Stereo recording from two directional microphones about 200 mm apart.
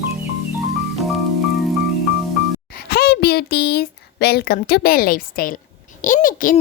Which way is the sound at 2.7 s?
50° left (ahead or behind).